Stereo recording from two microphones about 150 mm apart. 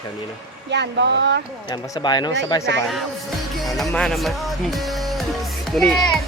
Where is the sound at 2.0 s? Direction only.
30° left (ahead or behind).